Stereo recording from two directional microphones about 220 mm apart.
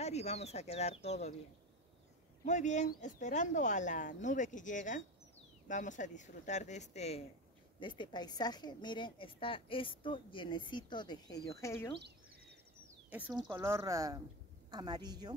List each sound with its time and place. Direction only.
0.0 s a woman's voice: 30° left (ahead or behind)
2.4 s a woman's voice: 35° left (ahead or behind); by 11.9 s 10° left (ahead or behind)
13.1 s a woman's voice: 15° right (ahead or behind)